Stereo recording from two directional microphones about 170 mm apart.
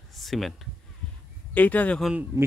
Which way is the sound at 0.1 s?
Centre (ahead or behind).